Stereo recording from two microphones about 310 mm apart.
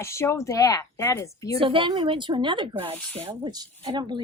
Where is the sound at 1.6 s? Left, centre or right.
Centre.